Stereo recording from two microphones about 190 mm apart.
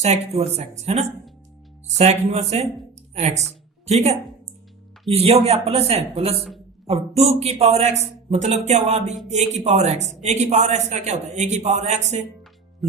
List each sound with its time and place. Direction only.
0.0 s speech: 35° right (ahead or behind)
5.1 s speech: 30° right (ahead or behind)